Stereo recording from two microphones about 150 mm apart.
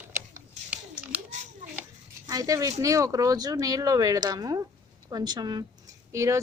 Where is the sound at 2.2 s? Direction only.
25° right (ahead or behind).